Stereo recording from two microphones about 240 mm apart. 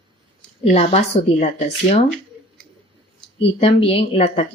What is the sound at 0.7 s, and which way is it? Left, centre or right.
Speech, left.